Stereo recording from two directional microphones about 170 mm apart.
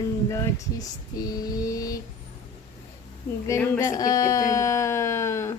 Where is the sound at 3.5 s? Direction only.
20° left (ahead or behind).